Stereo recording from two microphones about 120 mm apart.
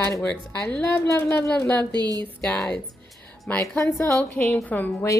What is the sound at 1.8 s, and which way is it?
Speech, 35° right (ahead or behind).